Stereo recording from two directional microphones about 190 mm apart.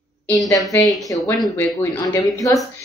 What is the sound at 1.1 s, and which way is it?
Speech, 15° left (ahead or behind).